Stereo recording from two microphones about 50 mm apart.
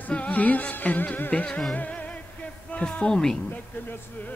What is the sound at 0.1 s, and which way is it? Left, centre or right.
Music, left.